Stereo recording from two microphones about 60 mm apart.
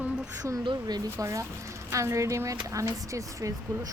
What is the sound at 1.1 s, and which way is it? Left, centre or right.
Speech, right.